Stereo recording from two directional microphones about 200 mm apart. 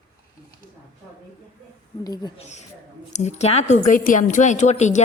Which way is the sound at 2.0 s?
20° left (ahead or behind).